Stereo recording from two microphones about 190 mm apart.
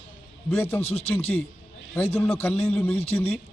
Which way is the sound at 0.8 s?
35° left (ahead or behind).